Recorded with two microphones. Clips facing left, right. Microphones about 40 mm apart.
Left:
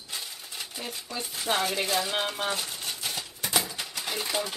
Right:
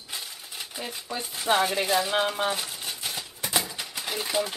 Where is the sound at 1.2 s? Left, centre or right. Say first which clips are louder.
Right 4 dB; centre.